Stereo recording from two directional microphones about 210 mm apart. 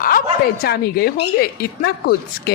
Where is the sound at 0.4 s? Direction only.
45° left (ahead or behind).